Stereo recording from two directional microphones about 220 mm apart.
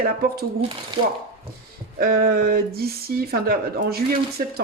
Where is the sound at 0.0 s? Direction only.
45° right (ahead or behind).